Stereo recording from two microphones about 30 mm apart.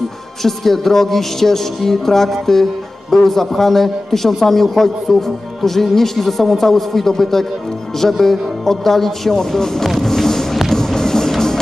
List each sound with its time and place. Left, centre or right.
0.4 s music: centre